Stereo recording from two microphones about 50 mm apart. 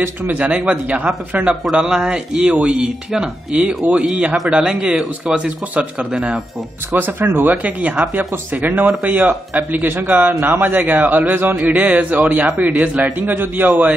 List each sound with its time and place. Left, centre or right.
0.4 s speech: right
1.6 s speech: centre
3.5 s speech: right
6.9 s speech: right
7.5 s a man's voice: right
13.3 s a man's voice: right